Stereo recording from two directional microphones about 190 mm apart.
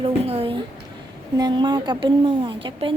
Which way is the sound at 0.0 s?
30° right (ahead or behind).